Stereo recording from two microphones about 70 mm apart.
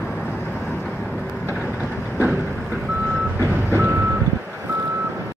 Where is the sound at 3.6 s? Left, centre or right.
Right.